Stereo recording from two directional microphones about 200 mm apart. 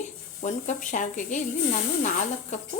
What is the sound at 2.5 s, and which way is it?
Speech, 35° left (ahead or behind).